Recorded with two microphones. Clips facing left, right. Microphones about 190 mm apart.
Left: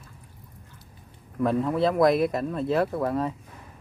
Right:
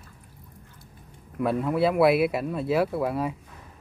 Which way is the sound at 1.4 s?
5° right (ahead or behind).